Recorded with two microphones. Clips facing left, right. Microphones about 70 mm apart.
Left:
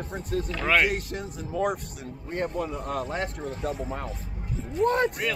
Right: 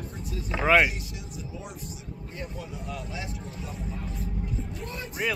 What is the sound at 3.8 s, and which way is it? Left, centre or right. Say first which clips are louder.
Speech: left 2 dB; left.